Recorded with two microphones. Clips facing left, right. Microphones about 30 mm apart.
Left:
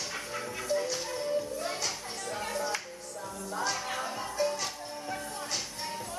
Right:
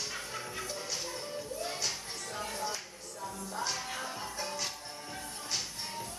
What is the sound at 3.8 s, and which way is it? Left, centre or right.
Music, centre.